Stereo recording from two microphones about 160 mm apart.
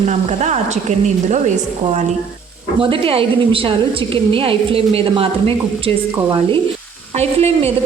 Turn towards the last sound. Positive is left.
turn(degrees=-40)  # may be behind; listen again after turning